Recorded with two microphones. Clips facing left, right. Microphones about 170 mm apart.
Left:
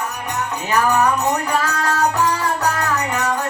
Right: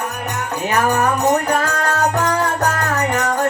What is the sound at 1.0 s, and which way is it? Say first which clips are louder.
Music: right 2 dB; 55° right (ahead or behind).